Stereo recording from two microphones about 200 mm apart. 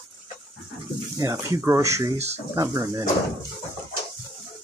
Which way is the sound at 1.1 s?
15° right (ahead or behind).